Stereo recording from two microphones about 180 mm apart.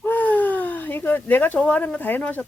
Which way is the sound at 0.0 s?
10° left (ahead or behind).